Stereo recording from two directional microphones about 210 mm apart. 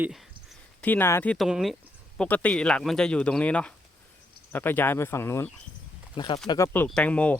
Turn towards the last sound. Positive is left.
turn(degrees=5)  # may be behind; listen again after turning